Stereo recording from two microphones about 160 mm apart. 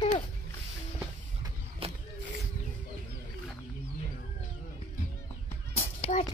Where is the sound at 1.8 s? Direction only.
35° right (ahead or behind).